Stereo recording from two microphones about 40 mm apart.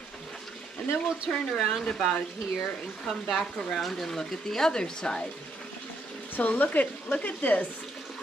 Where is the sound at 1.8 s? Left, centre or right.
Centre.